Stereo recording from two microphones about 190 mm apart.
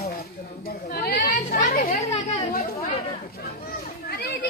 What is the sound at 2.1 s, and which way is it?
Chatter, 35° left (ahead or behind).